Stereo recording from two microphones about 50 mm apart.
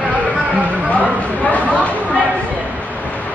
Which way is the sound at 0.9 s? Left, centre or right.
Left.